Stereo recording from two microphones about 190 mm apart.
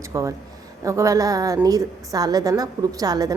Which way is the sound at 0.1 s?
15° right (ahead or behind).